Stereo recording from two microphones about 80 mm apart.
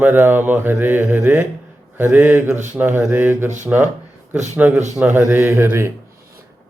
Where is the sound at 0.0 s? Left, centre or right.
Right.